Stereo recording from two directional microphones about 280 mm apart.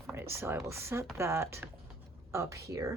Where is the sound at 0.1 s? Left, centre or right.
Centre.